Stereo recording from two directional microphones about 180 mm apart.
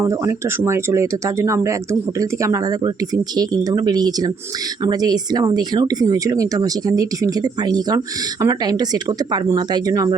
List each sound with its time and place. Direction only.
0.0 s speech: 15° right (ahead or behind)